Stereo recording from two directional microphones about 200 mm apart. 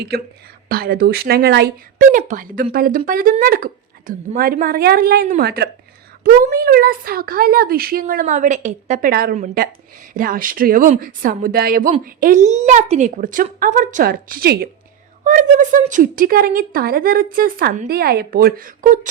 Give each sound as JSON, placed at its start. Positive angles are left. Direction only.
{"t": 0.7, "sound": "speech", "side_deg": -50}
{"t": 2.0, "sound": "speech", "side_deg": -40}